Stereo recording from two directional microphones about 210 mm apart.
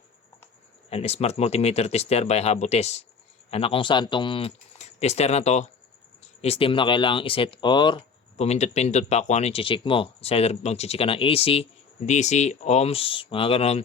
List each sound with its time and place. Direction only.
0.9 s speech: 30° left (ahead or behind)